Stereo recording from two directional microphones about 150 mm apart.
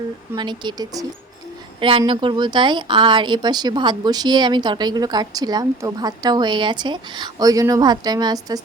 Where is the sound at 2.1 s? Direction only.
35° right (ahead or behind).